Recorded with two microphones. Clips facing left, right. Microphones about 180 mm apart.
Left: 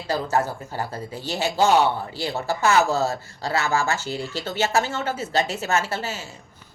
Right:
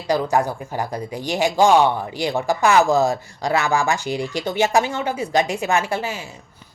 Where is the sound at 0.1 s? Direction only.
15° right (ahead or behind).